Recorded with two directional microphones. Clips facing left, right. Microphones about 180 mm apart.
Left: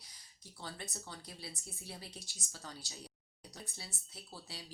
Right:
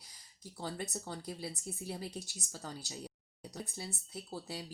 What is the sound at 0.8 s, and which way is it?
Speech, 45° right (ahead or behind).